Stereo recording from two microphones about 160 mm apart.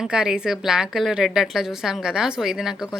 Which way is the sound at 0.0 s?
5° right (ahead or behind).